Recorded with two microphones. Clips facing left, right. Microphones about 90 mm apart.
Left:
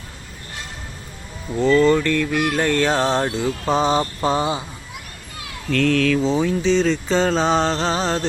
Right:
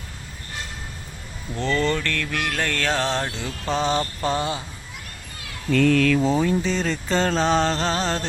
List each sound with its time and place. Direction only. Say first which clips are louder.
1.5 s speech: left 8 dB; 5° left (ahead or behind)
5.7 s mantra: even; 5° right (ahead or behind)